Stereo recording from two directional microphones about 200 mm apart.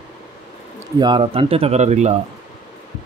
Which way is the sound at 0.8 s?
20° right (ahead or behind).